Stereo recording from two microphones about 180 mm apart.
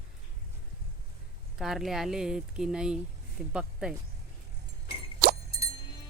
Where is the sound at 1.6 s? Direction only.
Centre (ahead or behind).